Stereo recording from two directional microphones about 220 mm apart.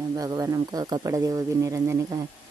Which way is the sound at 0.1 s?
15° right (ahead or behind).